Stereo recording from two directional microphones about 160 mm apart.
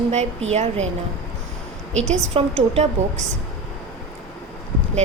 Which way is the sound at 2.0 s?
45° right (ahead or behind).